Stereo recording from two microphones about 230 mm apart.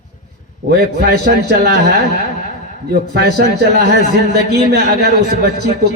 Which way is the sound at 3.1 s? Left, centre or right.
Right.